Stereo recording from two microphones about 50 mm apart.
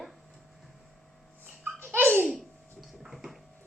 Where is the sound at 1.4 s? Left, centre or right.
Right.